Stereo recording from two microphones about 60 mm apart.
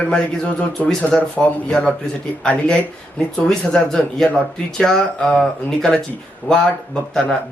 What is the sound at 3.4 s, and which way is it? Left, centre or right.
Speech, centre.